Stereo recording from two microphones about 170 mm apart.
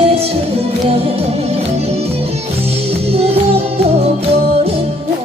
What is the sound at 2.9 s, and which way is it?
Music, 35° right (ahead or behind).